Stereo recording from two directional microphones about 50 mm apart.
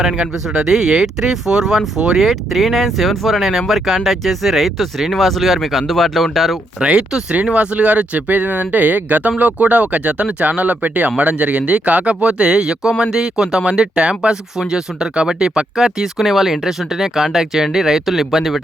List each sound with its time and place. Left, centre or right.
0.0 s speech: centre
6.7 s speech: centre